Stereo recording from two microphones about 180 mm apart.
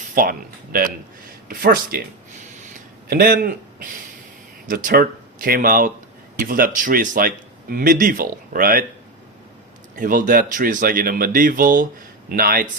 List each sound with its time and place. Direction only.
0.1 s speech: 50° right (ahead or behind)
3.1 s speech: 60° right (ahead or behind)
4.7 s speech: 50° right (ahead or behind)
10.0 s speech: 50° right (ahead or behind)